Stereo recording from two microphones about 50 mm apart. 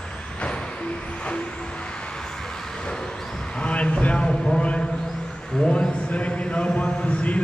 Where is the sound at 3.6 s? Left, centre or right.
Left.